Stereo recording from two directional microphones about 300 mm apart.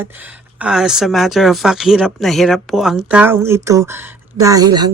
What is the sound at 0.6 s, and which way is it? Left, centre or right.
Speech, centre.